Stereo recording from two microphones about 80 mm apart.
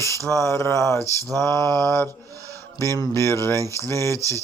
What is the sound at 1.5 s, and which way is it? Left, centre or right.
Mantra, right.